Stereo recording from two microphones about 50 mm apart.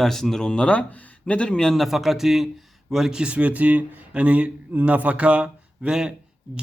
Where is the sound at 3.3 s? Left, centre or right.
Right.